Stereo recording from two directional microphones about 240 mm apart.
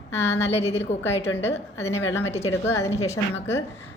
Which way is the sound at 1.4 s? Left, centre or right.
Left.